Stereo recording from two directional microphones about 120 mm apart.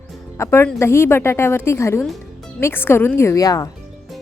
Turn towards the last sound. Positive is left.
turn(degrees=30)  # may be behind; listen again after turning